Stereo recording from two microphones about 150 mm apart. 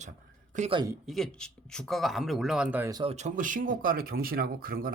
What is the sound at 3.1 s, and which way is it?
Speech, 50° right (ahead or behind).